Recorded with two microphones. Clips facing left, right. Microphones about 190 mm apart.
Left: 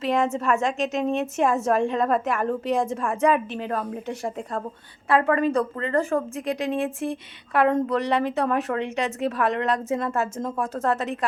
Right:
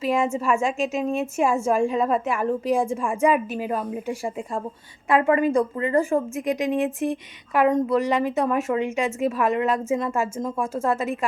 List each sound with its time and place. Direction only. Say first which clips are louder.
0.0 s a woman's voice: right 1 dB; 5° right (ahead or behind)